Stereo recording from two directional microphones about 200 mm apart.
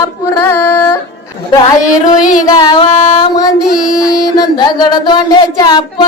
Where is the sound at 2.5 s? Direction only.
20° left (ahead or behind).